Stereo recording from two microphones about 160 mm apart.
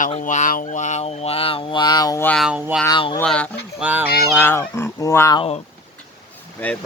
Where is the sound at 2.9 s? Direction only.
35° left (ahead or behind).